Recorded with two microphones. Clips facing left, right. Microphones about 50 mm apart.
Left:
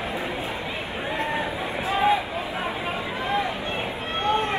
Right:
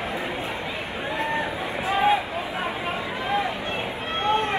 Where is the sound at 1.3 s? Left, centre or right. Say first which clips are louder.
Even; right.